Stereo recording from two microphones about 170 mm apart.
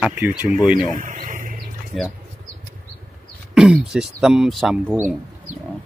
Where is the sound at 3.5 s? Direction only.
5° right (ahead or behind).